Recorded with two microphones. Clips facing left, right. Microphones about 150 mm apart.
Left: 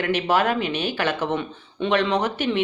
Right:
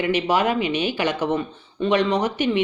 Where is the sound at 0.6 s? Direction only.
50° left (ahead or behind).